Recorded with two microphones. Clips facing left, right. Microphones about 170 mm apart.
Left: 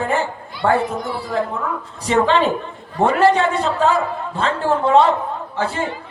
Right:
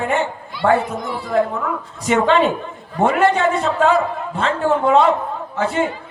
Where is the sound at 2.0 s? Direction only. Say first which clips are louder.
Right 1 dB; 30° left (ahead or behind).